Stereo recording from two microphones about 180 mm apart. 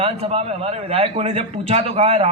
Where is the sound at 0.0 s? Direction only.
35° right (ahead or behind).